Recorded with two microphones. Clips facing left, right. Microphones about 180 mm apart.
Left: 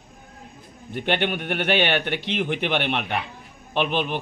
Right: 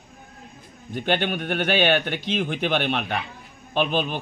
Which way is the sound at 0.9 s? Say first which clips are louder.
Even; 65° left (ahead or behind).